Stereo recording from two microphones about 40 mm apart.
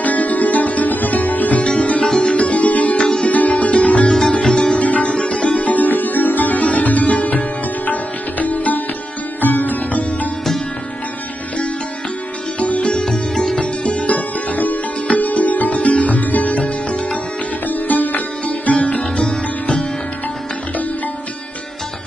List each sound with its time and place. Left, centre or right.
0.0 s music: left
1.6 s sitar: left
2.0 s music: centre
2.3 s music: left
3.0 s music: left
3.3 s music: left
4.5 s sitar: left
4.7 s sitar: left
9.4 s music: left
12.5 s sitar: left
12.9 s sitar: centre
13.6 s music: left
17.6 s sitar: left